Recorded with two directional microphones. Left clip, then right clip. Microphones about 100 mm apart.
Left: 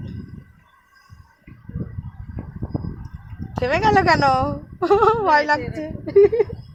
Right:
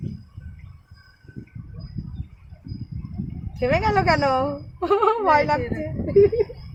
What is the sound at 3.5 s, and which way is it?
A woman's voice, 5° left (ahead or behind).